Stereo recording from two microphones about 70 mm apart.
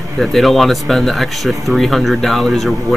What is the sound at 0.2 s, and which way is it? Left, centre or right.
Speech, centre.